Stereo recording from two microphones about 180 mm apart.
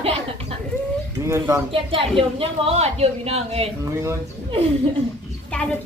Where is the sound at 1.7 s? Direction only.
30° right (ahead or behind).